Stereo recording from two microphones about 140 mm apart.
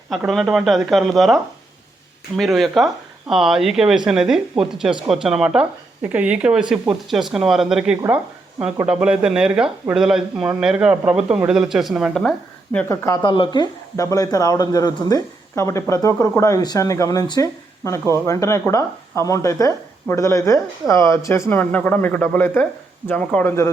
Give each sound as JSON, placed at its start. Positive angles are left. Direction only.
{"t": 0.3, "sound": "speech", "side_deg": 0}
{"t": 12.9, "sound": "speech", "side_deg": 20}
{"t": 13.2, "sound": "speech", "side_deg": 35}
{"t": 13.9, "sound": "speech", "side_deg": 25}